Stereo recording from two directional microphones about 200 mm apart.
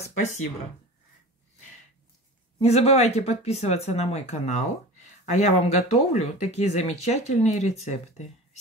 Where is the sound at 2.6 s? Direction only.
30° left (ahead or behind).